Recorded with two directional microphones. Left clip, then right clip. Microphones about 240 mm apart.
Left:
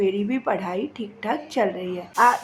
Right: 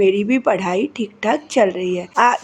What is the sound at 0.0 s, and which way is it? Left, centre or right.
A woman's voice, right.